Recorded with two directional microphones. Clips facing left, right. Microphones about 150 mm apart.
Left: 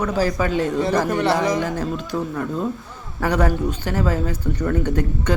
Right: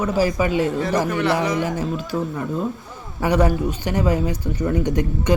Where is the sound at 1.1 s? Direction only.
35° left (ahead or behind).